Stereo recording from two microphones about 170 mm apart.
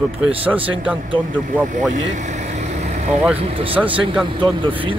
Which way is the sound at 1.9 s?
45° right (ahead or behind).